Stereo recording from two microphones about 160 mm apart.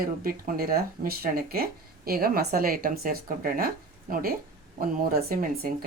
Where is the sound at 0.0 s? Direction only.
65° right (ahead or behind).